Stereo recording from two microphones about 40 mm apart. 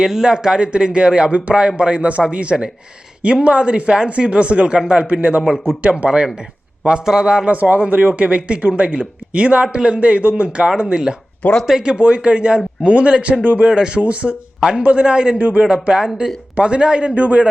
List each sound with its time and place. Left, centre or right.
0.0 s speech: centre; by 6.1 s right
6.1 s a man's voice: right
7.4 s speech: right
10.6 s a man's voice: right
11.9 s speech: right
13.4 s speech: right
13.7 s speech: right
14.6 s speech: right
15.4 s a man's voice: right
15.6 s a man's voice: centre
17.2 s speech: right